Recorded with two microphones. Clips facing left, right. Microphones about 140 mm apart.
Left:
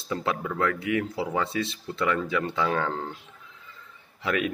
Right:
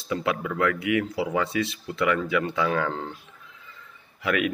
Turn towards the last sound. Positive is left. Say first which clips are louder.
# right 2 dB
turn(degrees=35)  # may be behind; listen again after turning